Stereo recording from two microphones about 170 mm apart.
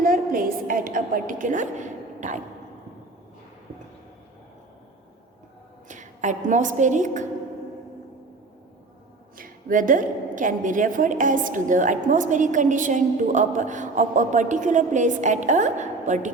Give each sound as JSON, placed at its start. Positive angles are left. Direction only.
{"t": 0.0, "sound": "a sound", "side_deg": -55}
{"t": 5.9, "sound": "a woman's voice", "side_deg": -45}
{"t": 9.4, "sound": "a woman's voice", "side_deg": -55}